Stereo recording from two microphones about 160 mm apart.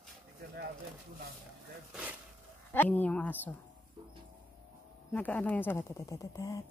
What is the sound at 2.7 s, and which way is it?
Speech, 10° left (ahead or behind).